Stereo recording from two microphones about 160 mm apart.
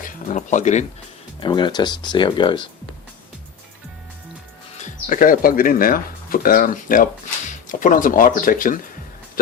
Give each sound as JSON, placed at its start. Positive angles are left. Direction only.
{"t": 0.3, "sound": "speech", "side_deg": 45}
{"t": 1.4, "sound": "speech", "side_deg": 30}
{"t": 4.8, "sound": "speech", "side_deg": 55}